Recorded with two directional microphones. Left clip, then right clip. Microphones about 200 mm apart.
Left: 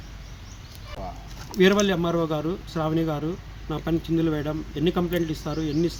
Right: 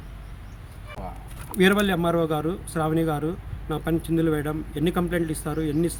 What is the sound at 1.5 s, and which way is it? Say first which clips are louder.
Speech: left 1 dB; 15° right (ahead or behind).